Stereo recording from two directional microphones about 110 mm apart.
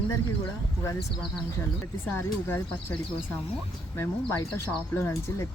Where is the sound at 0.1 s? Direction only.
25° left (ahead or behind).